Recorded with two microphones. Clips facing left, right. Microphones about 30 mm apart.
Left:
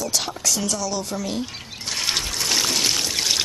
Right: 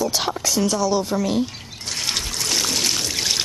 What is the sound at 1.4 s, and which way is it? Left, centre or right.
Trickle, centre.